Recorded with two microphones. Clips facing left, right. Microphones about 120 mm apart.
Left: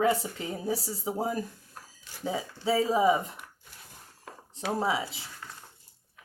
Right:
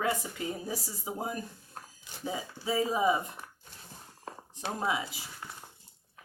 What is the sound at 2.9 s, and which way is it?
Speech, 25° left (ahead or behind).